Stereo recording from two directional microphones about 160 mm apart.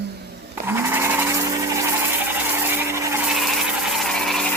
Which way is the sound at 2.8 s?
20° right (ahead or behind).